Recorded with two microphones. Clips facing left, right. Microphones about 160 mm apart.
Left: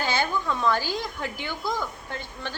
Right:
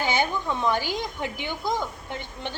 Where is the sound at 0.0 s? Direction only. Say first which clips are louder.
Right 1 dB; 20° right (ahead or behind).